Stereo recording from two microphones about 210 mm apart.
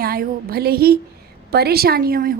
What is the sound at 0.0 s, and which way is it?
A woman's voice, 45° right (ahead or behind).